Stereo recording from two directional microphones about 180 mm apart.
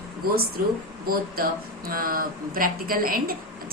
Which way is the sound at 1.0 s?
55° right (ahead or behind).